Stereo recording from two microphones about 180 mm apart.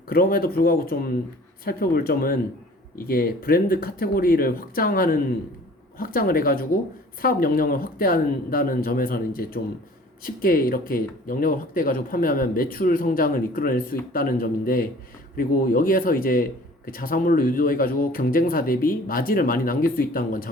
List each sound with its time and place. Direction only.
0.1 s a man's voice: 55° left (ahead or behind)